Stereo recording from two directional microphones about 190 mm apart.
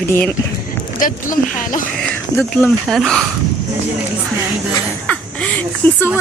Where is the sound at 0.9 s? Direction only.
45° left (ahead or behind).